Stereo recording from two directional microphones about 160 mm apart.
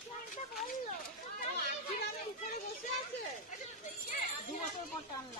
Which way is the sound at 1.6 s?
75° left (ahead or behind).